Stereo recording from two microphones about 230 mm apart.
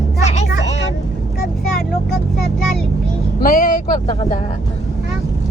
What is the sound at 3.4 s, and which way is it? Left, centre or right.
Speech, left.